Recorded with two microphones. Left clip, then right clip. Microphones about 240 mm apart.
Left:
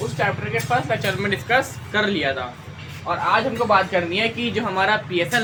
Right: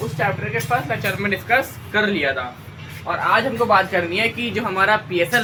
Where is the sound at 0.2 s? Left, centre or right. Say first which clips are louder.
Right 1 dB; centre.